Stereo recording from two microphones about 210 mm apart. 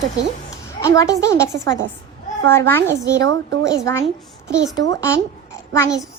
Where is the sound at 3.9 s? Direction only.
15° left (ahead or behind).